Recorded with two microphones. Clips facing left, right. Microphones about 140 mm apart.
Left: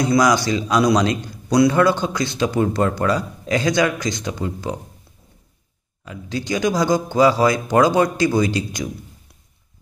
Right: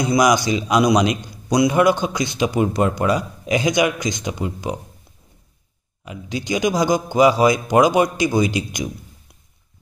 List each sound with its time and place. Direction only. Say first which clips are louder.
0.0 s a man's voice: even; 15° right (ahead or behind)
6.0 s a man's voice: even; 15° right (ahead or behind)